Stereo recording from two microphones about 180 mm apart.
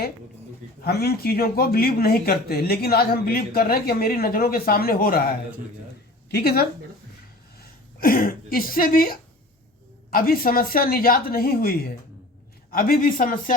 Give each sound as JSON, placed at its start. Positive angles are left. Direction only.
{"t": 0.8, "sound": "speech", "side_deg": 60}
{"t": 6.3, "sound": "speech", "side_deg": 60}
{"t": 8.0, "sound": "speech", "side_deg": 55}